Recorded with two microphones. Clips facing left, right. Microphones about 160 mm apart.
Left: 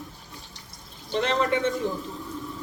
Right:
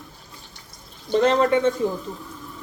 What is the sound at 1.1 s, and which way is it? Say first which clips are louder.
Speech: right 6 dB; 40° right (ahead or behind).